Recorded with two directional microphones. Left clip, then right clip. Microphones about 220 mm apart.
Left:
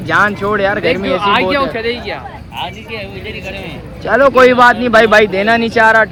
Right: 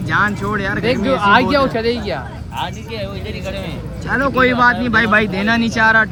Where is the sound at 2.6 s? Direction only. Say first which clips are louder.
Left 1 dB; 20° right (ahead or behind).